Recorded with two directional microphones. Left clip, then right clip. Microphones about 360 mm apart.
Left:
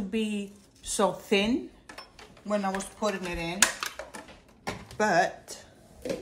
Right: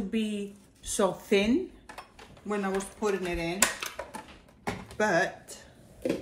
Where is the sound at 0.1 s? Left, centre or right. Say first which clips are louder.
Left 3 dB; centre.